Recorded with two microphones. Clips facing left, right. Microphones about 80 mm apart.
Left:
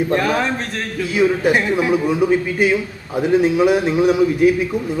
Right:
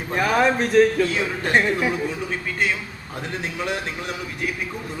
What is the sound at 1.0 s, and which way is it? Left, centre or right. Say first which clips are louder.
A man's voice: left 8 dB; centre.